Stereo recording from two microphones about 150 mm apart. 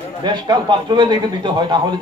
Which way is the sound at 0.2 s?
30° right (ahead or behind).